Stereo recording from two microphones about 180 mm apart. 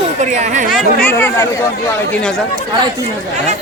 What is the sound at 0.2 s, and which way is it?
Speech, 40° right (ahead or behind).